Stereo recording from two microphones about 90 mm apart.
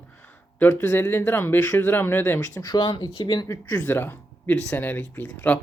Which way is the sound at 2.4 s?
40° left (ahead or behind).